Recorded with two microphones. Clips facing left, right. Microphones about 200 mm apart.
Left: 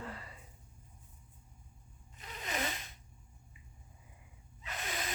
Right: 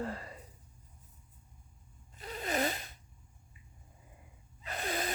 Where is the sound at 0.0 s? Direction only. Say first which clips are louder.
Right 7 dB; 40° right (ahead or behind).